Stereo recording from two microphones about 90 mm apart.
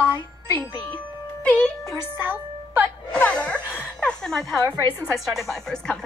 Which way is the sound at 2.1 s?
20° right (ahead or behind).